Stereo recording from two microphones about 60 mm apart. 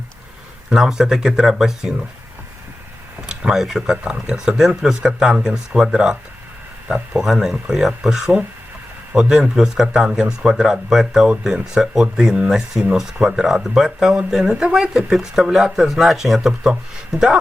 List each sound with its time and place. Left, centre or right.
0.7 s speech: centre
3.2 s speech: centre
3.9 s speech: centre